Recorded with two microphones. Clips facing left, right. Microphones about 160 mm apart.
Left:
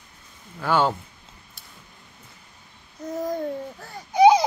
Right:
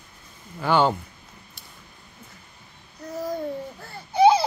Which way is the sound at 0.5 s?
Centre (ahead or behind).